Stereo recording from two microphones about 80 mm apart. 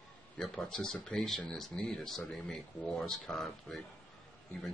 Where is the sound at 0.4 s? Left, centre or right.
Centre.